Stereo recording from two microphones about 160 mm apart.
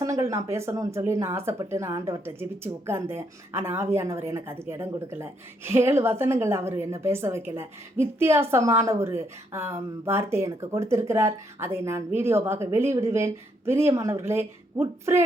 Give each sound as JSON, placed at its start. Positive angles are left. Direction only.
{"t": 0.0, "sound": "speech", "side_deg": -20}